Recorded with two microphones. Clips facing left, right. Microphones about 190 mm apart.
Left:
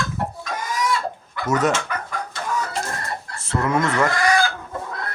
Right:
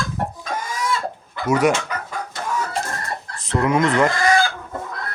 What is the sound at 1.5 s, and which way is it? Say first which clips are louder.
Speech: right 3 dB; 10° right (ahead or behind).